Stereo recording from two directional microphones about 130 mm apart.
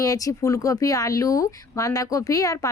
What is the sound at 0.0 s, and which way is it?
Speech, 25° left (ahead or behind).